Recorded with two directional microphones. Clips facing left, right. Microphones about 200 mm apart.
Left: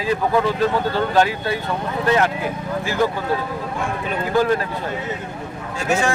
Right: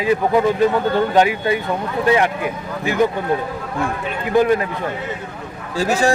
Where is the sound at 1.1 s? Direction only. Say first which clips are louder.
Right 3 dB; 15° right (ahead or behind).